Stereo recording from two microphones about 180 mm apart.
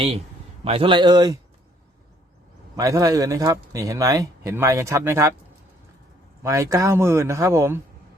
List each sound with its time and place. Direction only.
0.6 s speech: 30° right (ahead or behind)
2.7 s speech: 15° right (ahead or behind)
6.4 s speech: 15° right (ahead or behind)